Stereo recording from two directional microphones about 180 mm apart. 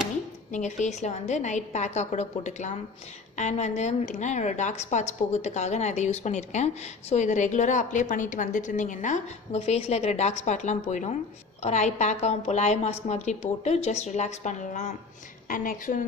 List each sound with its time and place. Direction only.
0.5 s a woman's voice: 40° left (ahead or behind)